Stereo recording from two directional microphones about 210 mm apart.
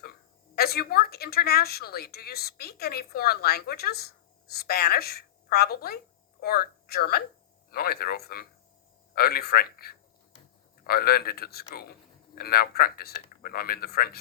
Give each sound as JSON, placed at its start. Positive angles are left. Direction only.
{"t": 0.5, "sound": "a woman's voice", "side_deg": 45}